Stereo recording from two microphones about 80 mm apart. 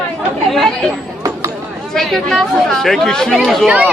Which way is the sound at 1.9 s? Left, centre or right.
Centre.